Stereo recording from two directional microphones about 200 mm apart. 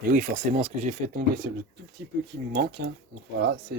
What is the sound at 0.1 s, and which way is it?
Speech, 40° right (ahead or behind).